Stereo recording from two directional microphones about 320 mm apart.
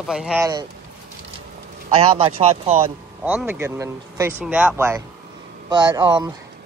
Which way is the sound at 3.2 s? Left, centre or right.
Centre.